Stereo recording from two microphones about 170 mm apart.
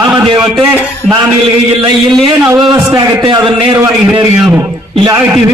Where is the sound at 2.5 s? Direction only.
25° right (ahead or behind).